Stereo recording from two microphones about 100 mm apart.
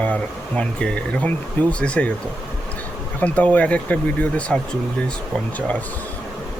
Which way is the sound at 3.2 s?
15° left (ahead or behind).